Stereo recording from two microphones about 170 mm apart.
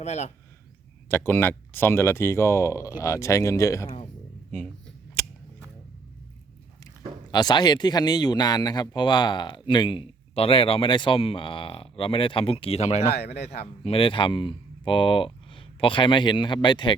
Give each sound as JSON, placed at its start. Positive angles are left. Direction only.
{"t": 0.0, "sound": "speech", "side_deg": 40}
{"t": 1.1, "sound": "speech", "side_deg": 10}
{"t": 7.3, "sound": "speech", "side_deg": 25}
{"t": 13.1, "sound": "speech", "side_deg": 70}
{"t": 13.8, "sound": "speech", "side_deg": 35}